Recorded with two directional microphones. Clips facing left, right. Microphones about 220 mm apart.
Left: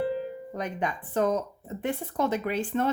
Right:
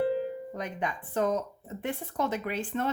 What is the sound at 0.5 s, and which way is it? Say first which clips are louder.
Speech: left 3 dB; 40° left (ahead or behind).